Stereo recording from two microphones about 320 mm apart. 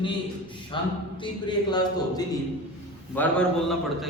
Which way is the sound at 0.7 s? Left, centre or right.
Centre.